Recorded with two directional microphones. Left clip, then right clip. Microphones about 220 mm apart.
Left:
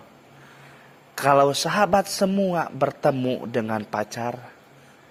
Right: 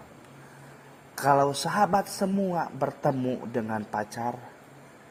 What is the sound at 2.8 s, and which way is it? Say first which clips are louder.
Speech: left 7 dB; 35° left (ahead or behind).